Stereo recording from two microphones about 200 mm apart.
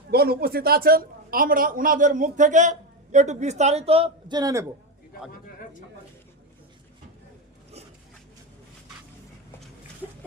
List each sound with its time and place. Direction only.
0.1 s a woman's voice: 50° right (ahead or behind); by 4.6 s 20° right (ahead or behind)